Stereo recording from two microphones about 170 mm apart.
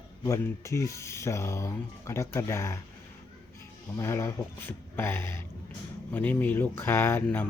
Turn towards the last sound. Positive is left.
turn(degrees=10)  # may be behind; listen again after turning